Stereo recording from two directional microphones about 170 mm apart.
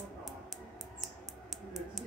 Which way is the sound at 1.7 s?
Centre (ahead or behind).